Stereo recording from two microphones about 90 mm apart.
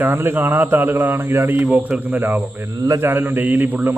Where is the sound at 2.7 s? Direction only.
40° right (ahead or behind).